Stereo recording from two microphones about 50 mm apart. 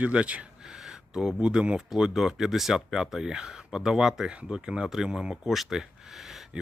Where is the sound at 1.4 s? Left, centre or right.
Centre.